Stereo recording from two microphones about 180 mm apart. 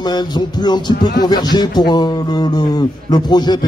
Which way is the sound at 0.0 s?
25° left (ahead or behind).